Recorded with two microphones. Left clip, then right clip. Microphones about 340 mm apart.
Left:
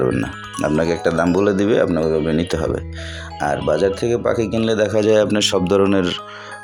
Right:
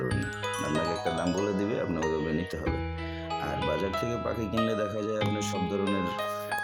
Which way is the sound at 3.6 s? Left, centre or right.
Right.